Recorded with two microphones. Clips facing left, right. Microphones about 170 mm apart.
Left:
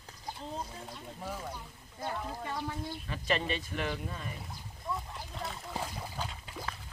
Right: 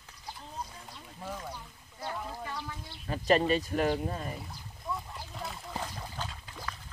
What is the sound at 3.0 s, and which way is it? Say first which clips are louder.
Speech: right 8 dB; 40° right (ahead or behind).